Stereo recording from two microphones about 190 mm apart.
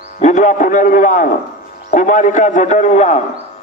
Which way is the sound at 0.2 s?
40° left (ahead or behind).